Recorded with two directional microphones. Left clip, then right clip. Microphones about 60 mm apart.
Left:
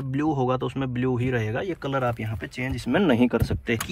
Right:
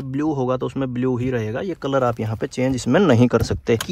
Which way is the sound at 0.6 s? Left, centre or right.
Right.